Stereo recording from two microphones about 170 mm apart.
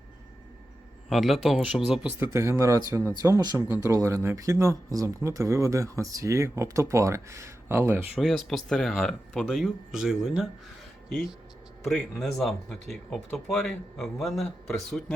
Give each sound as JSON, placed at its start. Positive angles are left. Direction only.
{"t": 1.1, "sound": "speech", "side_deg": 0}
{"t": 8.2, "sound": "speech", "side_deg": 0}
{"t": 11.9, "sound": "speech", "side_deg": 5}